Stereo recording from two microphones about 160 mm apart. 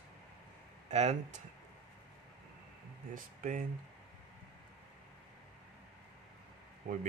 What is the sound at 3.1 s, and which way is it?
Speech, 55° right (ahead or behind).